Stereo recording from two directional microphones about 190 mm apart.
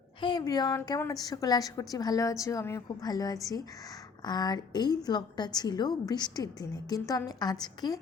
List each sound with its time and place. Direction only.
0.2 s a woman's voice: 25° left (ahead or behind)